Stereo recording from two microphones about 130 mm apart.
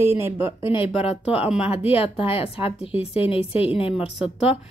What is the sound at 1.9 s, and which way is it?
A woman's voice, 45° left (ahead or behind).